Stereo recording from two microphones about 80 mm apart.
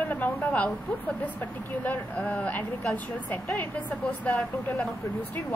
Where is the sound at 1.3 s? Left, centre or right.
Left.